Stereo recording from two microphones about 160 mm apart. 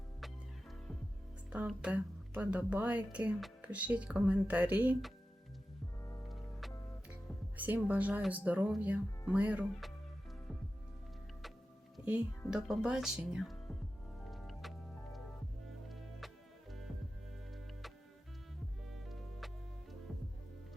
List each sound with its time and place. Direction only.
1.5 s speech: 5° right (ahead or behind)
6.0 s music: 20° left (ahead or behind)
6.2 s music: centre (ahead or behind)
7.5 s speech: 10° right (ahead or behind)
12.5 s speech: 5° right (ahead or behind)
14.3 s music: centre (ahead or behind)
15.9 s music: centre (ahead or behind)
18.9 s music: centre (ahead or behind)